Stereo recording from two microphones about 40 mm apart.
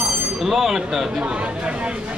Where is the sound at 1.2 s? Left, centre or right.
Right.